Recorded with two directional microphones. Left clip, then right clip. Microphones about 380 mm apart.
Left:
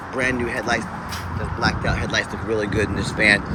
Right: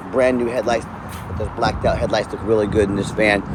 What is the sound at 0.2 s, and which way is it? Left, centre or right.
Speech, centre.